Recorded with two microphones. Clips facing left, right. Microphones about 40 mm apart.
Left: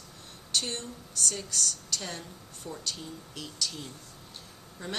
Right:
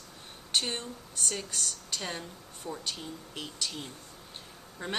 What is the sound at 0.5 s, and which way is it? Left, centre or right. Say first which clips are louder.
Speech: right 1 dB; centre.